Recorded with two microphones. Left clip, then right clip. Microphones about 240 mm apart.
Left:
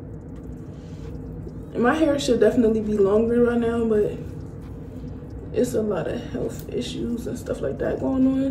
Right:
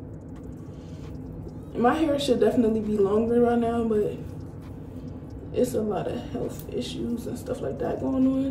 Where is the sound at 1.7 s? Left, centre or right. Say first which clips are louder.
Left 3 dB; centre.